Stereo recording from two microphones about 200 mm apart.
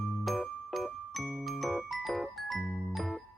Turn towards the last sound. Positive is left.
turn(degrees=0)  # may be behind; listen again after turning